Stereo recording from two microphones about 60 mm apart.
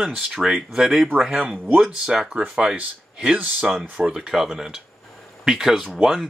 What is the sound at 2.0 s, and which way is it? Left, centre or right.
Speech, centre.